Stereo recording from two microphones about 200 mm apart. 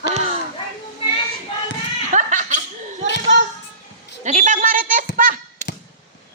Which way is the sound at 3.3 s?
60° right (ahead or behind).